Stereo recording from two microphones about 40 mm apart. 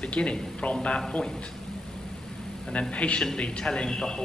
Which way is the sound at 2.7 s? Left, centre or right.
Left.